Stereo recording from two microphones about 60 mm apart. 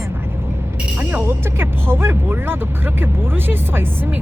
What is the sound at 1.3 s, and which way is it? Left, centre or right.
Speech, right.